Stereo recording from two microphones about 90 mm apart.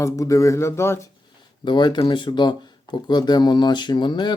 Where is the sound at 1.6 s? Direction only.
60° left (ahead or behind).